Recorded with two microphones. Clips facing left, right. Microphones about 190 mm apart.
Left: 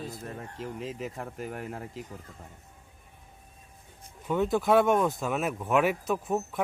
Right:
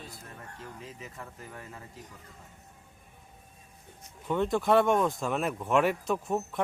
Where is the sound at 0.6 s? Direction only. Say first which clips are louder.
Left 10 dB; 90° left; by 2.0 s 70° left (ahead or behind).